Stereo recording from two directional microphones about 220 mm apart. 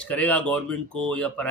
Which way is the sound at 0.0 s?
5° left (ahead or behind).